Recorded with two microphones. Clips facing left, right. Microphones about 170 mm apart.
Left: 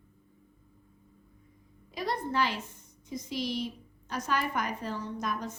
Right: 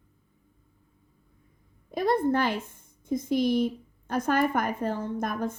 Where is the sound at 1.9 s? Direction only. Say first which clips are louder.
Right 9 dB; 55° right (ahead or behind).